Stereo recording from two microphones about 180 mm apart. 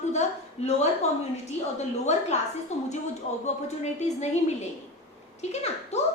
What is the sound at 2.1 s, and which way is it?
Speech, 40° left (ahead or behind).